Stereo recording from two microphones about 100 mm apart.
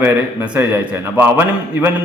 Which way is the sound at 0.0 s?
15° right (ahead or behind).